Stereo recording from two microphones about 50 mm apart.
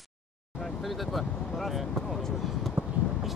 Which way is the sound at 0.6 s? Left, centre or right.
Centre.